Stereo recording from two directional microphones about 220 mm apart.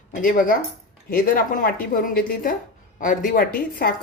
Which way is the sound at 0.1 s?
40° left (ahead or behind).